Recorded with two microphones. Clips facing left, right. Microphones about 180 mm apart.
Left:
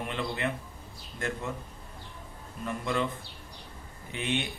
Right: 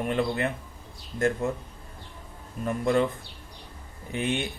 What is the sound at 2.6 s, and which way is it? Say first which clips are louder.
Speech: right 7 dB; 45° right (ahead or behind).